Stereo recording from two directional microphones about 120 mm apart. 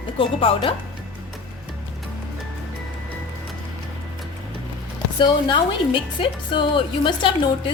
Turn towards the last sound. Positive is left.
turn(degrees=40)  # may be behind; listen again after turning